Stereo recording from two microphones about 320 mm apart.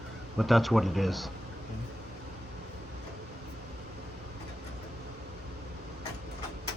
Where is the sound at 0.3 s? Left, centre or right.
Centre.